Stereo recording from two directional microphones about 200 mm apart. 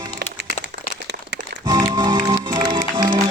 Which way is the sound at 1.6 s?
20° right (ahead or behind).